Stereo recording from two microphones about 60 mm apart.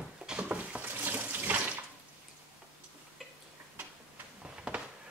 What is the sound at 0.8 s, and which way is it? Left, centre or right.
Water tap, right.